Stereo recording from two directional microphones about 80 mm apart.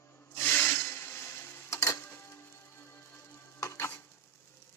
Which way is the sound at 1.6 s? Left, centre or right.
Left.